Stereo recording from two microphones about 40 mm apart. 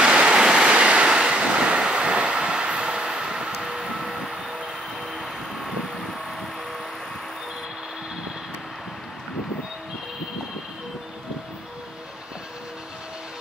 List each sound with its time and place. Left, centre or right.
0.0 s waves: right
4.0 s vehicle: centre